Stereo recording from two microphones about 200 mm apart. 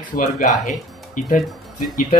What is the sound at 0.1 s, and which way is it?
A man's voice, 40° left (ahead or behind).